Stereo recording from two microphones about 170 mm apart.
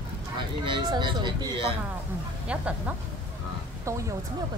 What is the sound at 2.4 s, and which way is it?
Speech, 5° right (ahead or behind).